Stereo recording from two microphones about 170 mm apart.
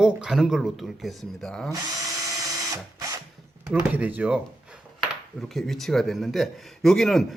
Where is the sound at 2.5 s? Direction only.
20° right (ahead or behind).